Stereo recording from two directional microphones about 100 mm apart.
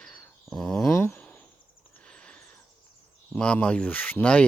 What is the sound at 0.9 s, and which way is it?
Speech, 25° left (ahead or behind).